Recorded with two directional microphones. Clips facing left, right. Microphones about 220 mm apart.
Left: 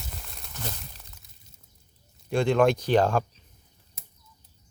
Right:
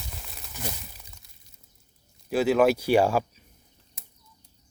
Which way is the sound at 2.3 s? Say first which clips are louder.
Right 1 dB; 5° right (ahead or behind).